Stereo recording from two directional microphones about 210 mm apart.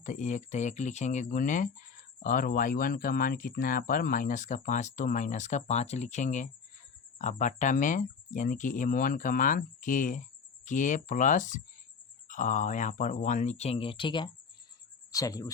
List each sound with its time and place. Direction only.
0.0 s speech: 35° left (ahead or behind); by 15.4 s 15° left (ahead or behind)